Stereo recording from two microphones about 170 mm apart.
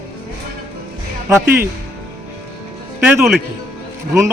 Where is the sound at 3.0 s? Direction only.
Centre (ahead or behind).